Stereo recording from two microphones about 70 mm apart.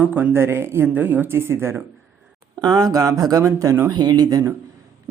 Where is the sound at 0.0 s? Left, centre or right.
Right.